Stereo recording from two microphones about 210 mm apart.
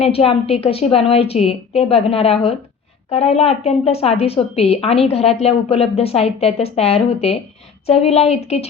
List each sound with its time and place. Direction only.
0.0 s a woman's voice: 30° left (ahead or behind)